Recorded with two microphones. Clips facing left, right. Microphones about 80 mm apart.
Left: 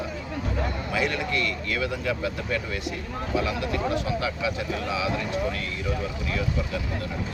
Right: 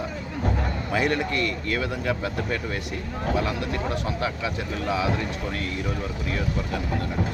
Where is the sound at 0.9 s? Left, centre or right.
Right.